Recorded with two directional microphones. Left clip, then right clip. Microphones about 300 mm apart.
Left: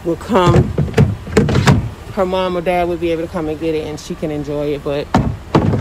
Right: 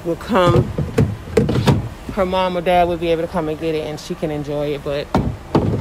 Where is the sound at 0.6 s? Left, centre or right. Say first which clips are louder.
Left 3 dB; left.